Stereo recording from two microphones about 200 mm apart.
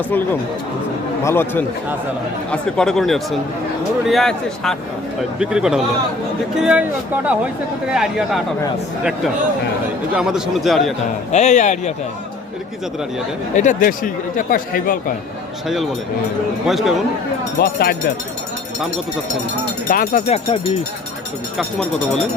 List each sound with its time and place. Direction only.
1.2 s a man's voice: 10° left (ahead or behind); by 6.8 s 5° right (ahead or behind)
10.2 s a man's voice: 5° right (ahead or behind)
11.3 s speech: 35° left (ahead or behind)
13.6 s speech: 40° left (ahead or behind)
15.6 s a man's voice: centre (ahead or behind)
17.6 s speech: 55° left (ahead or behind)
19.9 s speech: 40° left (ahead or behind)
21.6 s a man's voice: 5° left (ahead or behind)